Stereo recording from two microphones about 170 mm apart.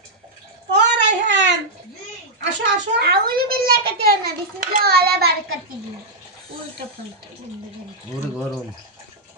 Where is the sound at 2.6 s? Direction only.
70° right (ahead or behind).